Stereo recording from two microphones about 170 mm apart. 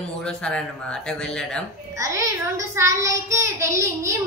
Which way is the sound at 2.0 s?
15° right (ahead or behind).